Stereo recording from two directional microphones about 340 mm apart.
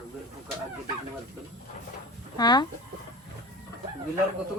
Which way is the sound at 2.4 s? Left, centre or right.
Centre.